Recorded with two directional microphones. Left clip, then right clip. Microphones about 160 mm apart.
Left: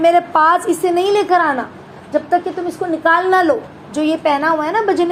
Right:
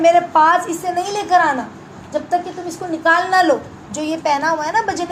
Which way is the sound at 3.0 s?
25° left (ahead or behind).